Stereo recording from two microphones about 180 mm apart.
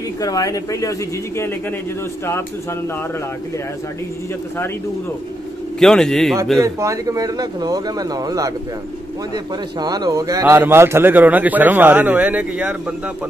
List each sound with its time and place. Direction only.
0.2 s speech: 20° left (ahead or behind)
5.8 s a man's voice: centre (ahead or behind)
6.6 s a man's voice: 15° right (ahead or behind)